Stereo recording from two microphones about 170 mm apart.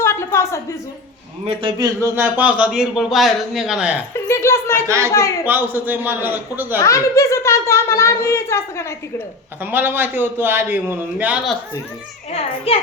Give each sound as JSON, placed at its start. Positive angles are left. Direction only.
{"t": 0.0, "sound": "a sound", "side_deg": 15}
{"t": 1.5, "sound": "a man's voice", "side_deg": -30}
{"t": 2.0, "sound": "a man's voice", "side_deg": -15}
{"t": 4.3, "sound": "a woman's voice", "side_deg": 15}
{"t": 4.9, "sound": "a man's voice", "side_deg": -15}
{"t": 5.1, "sound": "a woman's voice", "side_deg": 20}
{"t": 5.5, "sound": "a man's voice", "side_deg": -10}
{"t": 6.7, "sound": "a woman's voice", "side_deg": 20}
{"t": 9.6, "sound": "a man's voice", "side_deg": -10}
{"t": 12.3, "sound": "a child's voice", "side_deg": 35}